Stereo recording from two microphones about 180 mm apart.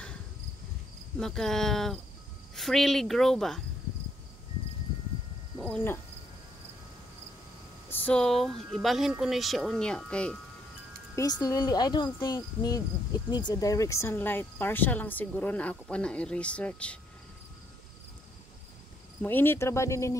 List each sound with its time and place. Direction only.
1.2 s speech: centre (ahead or behind)
7.9 s speech: 5° left (ahead or behind)
11.1 s insect: 20° left (ahead or behind)
19.2 s insect: 10° left (ahead or behind)